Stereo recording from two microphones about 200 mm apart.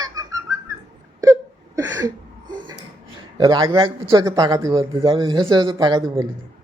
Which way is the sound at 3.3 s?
20° right (ahead or behind).